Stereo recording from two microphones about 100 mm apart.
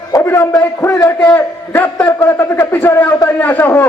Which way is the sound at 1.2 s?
15° left (ahead or behind).